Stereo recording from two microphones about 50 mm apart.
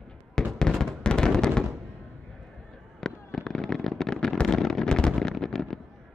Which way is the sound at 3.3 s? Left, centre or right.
Centre.